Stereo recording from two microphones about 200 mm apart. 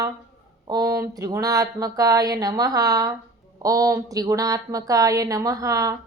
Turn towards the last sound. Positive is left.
turn(degrees=-15)  # may be behind; listen again after turning